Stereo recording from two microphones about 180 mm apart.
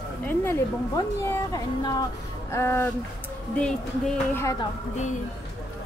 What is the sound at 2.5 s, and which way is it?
Speech, 15° left (ahead or behind).